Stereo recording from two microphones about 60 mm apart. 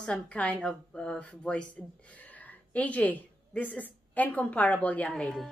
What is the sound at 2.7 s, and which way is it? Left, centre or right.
A woman's voice, left.